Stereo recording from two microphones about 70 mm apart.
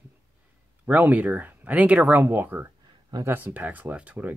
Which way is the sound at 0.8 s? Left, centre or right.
Right.